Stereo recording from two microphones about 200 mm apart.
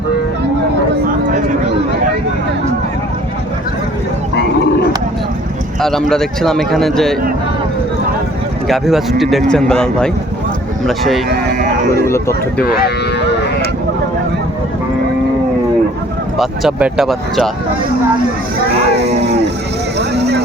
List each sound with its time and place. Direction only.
4.4 s a sound: 55° left (ahead or behind)
5.8 s a man's voice: centre (ahead or behind)
8.6 s a man's voice: centre (ahead or behind)
11.3 s speech: 50° right (ahead or behind)
16.4 s a man's voice: centre (ahead or behind)
20.0 s boat: 55° right (ahead or behind)